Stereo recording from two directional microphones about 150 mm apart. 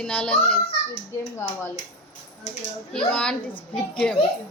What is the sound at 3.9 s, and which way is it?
Speech, 5° left (ahead or behind).